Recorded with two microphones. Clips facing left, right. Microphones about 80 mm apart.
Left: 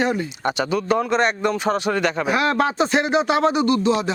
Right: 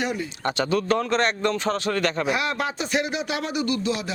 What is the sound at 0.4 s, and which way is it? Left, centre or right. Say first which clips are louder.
A man's voice: left 1 dB; centre.